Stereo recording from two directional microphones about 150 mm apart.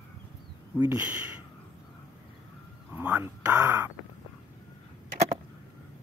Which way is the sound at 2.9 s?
10° right (ahead or behind).